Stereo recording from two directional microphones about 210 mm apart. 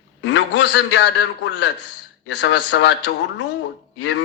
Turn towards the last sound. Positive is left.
turn(degrees=60)  # may be behind; listen again after turning